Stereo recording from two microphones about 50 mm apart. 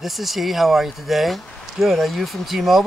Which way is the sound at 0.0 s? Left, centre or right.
Centre.